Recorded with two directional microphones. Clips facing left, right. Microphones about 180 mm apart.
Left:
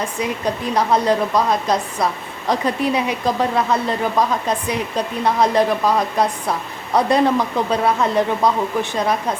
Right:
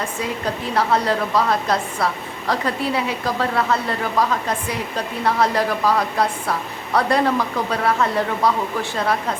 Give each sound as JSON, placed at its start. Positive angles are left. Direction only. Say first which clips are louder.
{"t": 0.2, "sound": "a woman's voice", "louder": "left 4 dB", "side_deg": 15}